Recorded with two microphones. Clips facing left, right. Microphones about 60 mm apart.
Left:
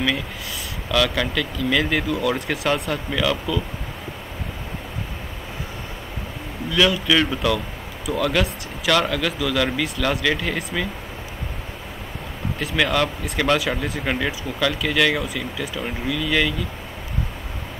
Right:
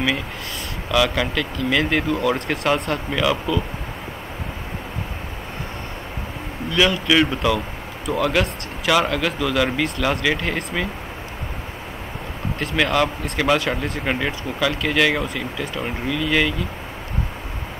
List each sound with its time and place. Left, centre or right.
0.9 s speech: centre
2.4 s speech: centre
3.1 s speech: centre
6.7 s speech: centre
12.7 s speech: centre